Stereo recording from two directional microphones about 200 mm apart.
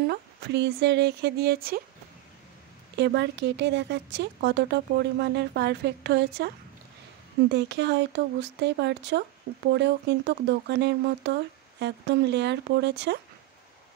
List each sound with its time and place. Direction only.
0.1 s speech: 55° right (ahead or behind)
3.0 s speech: 60° right (ahead or behind)